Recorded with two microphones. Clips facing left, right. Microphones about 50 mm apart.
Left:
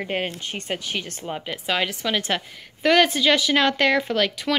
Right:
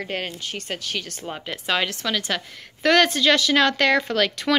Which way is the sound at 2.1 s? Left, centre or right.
Left.